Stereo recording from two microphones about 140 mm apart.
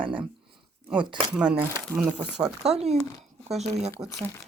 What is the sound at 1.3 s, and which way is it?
Speech, 10° right (ahead or behind).